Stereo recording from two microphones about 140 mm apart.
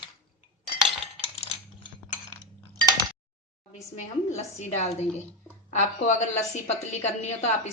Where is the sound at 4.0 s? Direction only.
55° left (ahead or behind).